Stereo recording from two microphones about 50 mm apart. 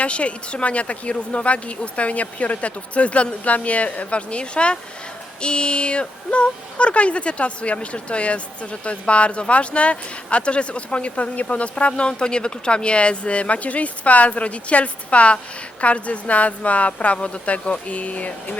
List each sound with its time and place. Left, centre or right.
0.0 s speech: left